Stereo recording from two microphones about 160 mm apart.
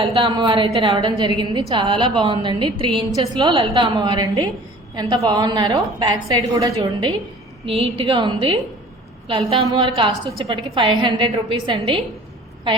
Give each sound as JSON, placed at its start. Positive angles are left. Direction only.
{"t": 0.0, "sound": "a woman's voice", "side_deg": -30}